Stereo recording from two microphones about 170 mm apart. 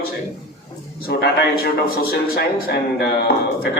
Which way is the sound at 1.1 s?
70° left (ahead or behind).